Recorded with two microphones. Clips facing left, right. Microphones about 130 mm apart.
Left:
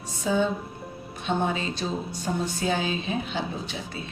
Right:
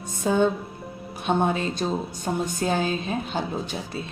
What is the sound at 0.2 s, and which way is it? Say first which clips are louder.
Speech: right 3 dB; 55° right (ahead or behind).